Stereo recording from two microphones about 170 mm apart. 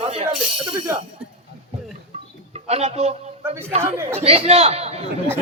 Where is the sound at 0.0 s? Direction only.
35° right (ahead or behind).